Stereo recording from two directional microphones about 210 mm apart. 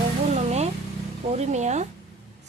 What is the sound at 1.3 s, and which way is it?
Speech, 30° right (ahead or behind).